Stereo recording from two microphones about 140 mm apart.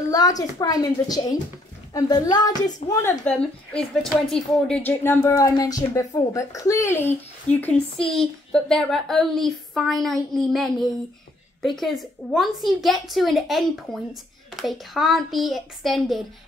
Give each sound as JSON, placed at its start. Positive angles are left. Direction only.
{"t": 0.1, "sound": "a woman's voice", "side_deg": 25}
{"t": 3.3, "sound": "a woman's voice", "side_deg": 5}
{"t": 7.6, "sound": "a woman's voice", "side_deg": 5}